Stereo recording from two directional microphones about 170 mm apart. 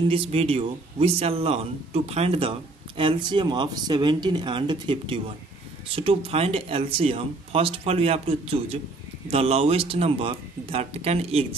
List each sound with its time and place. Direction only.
0.1 s speech: 35° right (ahead or behind)